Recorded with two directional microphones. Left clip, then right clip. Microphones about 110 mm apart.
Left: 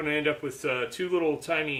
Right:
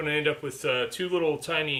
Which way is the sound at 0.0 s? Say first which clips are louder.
Right 1 dB; 25° left (ahead or behind).